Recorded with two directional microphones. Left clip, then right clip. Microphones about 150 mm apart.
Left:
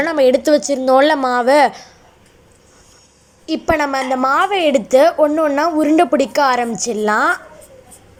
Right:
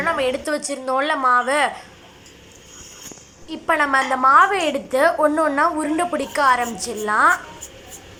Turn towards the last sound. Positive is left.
turn(degrees=25)  # may be behind; listen again after turning